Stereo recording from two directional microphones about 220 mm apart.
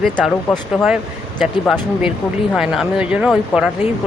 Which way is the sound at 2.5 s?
Centre (ahead or behind).